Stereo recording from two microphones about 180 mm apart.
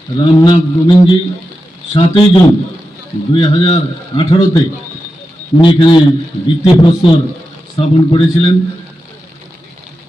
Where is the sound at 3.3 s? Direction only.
30° left (ahead or behind).